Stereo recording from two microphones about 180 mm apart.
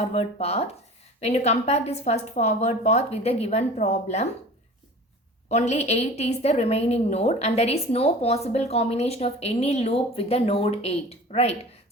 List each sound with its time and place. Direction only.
0.0 s a woman's voice: 35° left (ahead or behind)
5.5 s a woman's voice: 40° left (ahead or behind)